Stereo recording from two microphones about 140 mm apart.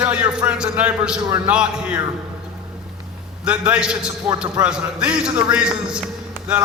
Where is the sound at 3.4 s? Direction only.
10° right (ahead or behind).